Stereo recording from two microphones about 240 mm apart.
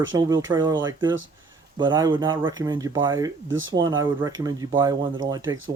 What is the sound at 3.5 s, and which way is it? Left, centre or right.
Speech, right.